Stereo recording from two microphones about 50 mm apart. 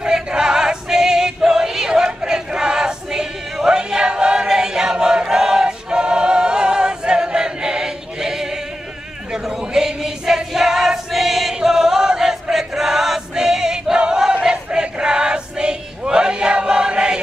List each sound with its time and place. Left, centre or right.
0.0 s music: centre
9.3 s choir: centre